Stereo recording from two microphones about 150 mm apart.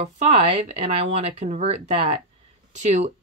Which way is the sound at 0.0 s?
40° right (ahead or behind).